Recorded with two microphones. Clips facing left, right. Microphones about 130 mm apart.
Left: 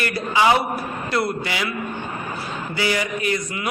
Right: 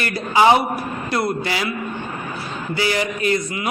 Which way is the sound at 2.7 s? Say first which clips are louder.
Right 2 dB; 30° right (ahead or behind).